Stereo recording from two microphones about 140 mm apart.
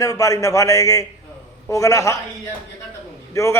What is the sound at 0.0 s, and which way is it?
A man's voice, 25° left (ahead or behind).